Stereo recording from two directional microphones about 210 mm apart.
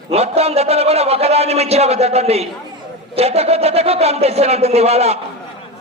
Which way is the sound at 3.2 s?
30° right (ahead or behind).